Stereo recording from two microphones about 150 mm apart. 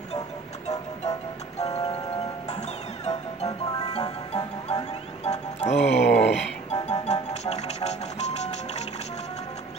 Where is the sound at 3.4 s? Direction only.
25° left (ahead or behind).